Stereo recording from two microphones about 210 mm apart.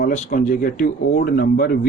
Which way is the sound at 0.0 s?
40° left (ahead or behind).